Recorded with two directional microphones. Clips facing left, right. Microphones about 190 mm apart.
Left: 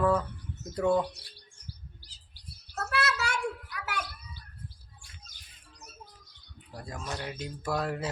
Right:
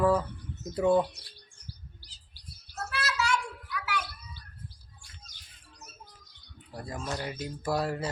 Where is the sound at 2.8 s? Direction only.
60° left (ahead or behind).